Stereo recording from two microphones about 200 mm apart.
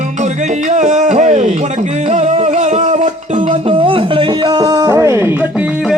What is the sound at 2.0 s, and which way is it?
Music, 35° right (ahead or behind).